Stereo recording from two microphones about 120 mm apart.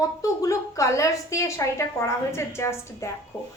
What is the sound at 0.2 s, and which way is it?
A woman's voice, 25° left (ahead or behind).